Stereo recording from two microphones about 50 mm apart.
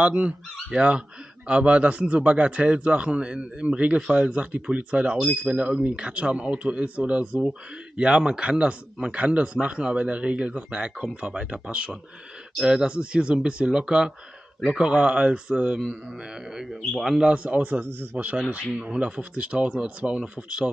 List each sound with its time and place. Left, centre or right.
0.0 s a man's voice: right
1.5 s a man's voice: right
5.1 s speech: centre
5.5 s a man's voice: right; by 17.2 s centre
17.2 s a man's voice: right